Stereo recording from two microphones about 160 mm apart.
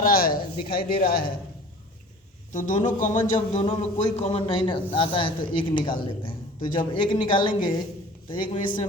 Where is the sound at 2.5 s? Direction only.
50° left (ahead or behind).